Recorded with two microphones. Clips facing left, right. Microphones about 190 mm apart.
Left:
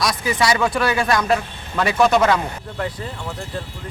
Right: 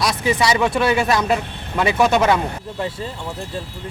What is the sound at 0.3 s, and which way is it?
Speech, 25° right (ahead or behind).